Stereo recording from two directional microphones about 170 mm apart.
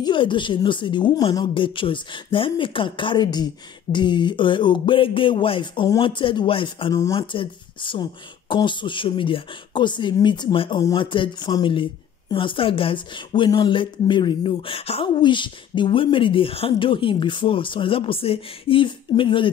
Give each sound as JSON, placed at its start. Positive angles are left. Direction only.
{"t": 0.0, "sound": "speech", "side_deg": 30}